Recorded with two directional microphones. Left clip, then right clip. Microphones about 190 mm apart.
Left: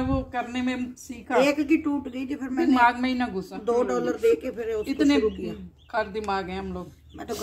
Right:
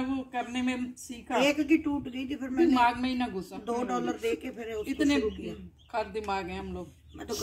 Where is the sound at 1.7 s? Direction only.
20° right (ahead or behind).